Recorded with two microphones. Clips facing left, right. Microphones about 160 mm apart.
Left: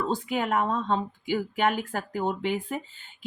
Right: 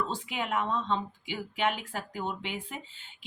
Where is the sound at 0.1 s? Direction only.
45° left (ahead or behind).